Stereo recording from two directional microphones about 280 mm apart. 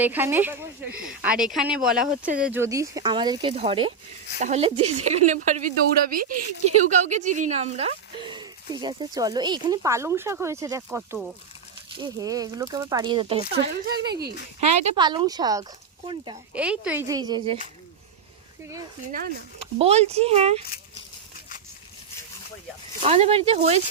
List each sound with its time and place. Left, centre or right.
0.0 s speech: centre
2.0 s speech: right
2.4 s speech: centre
13.5 s speech: right
14.6 s speech: centre
19.8 s speech: right
23.0 s speech: right